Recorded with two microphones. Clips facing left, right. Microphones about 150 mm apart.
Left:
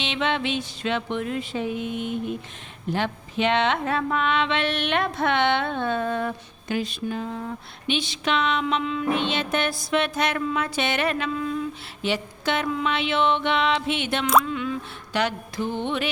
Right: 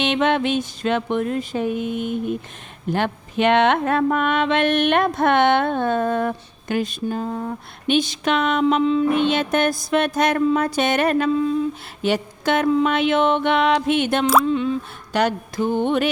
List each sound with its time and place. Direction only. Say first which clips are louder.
0.0 s speech: right 7 dB; 50° right (ahead or behind)
8.6 s a sound: right 9 dB; 35° right (ahead or behind)
9.1 s speech: right 6 dB; 50° right (ahead or behind)
11.3 s speech: right 7 dB; 30° right (ahead or behind)
12.0 s speech: right 5 dB; 45° right (ahead or behind)
14.4 s a sound: right 8 dB; 30° right (ahead or behind)
15.1 s speech: right 5 dB; 45° right (ahead or behind)